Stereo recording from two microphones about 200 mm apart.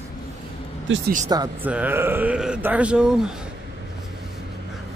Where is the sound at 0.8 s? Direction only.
70° right (ahead or behind).